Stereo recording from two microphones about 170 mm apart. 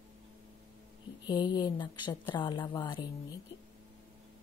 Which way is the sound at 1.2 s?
25° left (ahead or behind).